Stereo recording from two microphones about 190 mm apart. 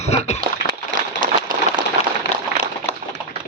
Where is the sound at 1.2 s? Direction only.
45° right (ahead or behind).